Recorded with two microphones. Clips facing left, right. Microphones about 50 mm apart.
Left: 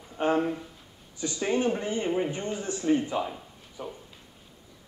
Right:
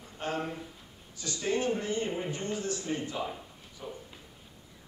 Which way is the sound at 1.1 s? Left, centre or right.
Left.